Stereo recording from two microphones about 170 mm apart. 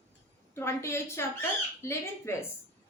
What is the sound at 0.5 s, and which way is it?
A woman's voice, 15° left (ahead or behind).